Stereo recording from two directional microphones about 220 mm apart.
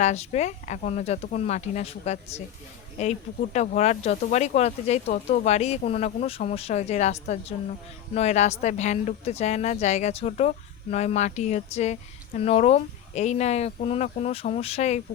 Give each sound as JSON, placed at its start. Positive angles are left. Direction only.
{"t": 0.0, "sound": "speech", "side_deg": 30}